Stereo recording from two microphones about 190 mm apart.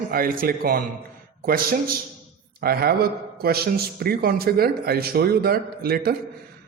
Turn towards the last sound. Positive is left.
turn(degrees=-55)  # may be behind; listen again after turning